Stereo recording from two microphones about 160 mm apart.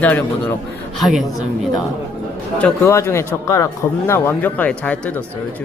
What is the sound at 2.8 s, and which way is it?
Speech, 15° left (ahead or behind).